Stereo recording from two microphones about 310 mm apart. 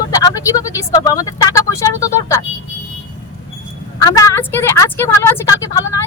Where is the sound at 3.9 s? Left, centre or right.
Centre.